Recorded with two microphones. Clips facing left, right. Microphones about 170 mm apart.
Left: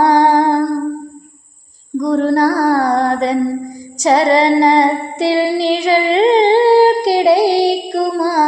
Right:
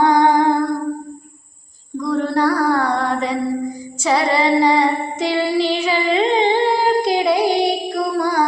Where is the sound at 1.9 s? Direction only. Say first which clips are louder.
Left 5 dB; 35° left (ahead or behind).